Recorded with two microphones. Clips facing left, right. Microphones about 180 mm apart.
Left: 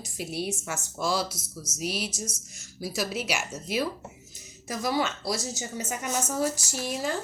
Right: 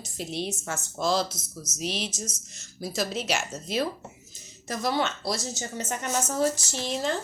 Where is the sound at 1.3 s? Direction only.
30° left (ahead or behind).